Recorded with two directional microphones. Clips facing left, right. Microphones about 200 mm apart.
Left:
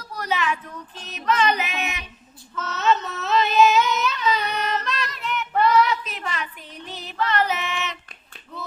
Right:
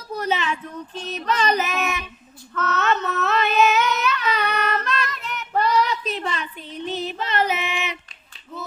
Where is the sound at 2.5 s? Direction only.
60° right (ahead or behind); by 8.0 s 10° right (ahead or behind).